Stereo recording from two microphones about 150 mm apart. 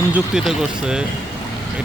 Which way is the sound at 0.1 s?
5° right (ahead or behind).